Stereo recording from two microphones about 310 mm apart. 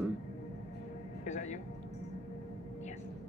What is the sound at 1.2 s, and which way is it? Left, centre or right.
Speech, left.